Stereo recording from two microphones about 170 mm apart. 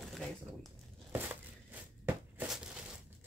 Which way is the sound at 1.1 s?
10° right (ahead or behind).